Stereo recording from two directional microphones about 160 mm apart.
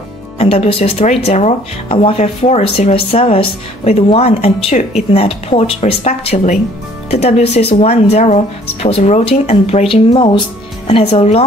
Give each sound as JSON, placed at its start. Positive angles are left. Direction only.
{"t": 0.4, "sound": "speech", "side_deg": 40}